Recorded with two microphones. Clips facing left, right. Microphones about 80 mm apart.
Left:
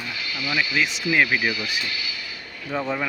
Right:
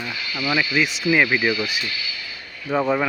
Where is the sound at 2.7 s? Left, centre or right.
Right.